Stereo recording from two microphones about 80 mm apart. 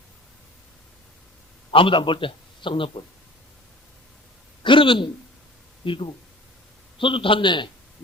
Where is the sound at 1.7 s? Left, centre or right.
Left.